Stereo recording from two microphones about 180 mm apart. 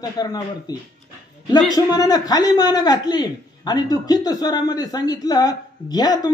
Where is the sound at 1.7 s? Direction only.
20° left (ahead or behind).